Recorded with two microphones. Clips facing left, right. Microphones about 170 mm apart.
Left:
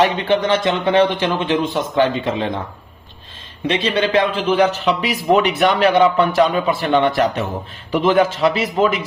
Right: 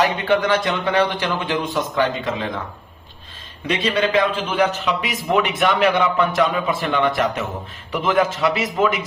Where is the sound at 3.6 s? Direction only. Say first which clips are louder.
Left 2 dB; 30° left (ahead or behind).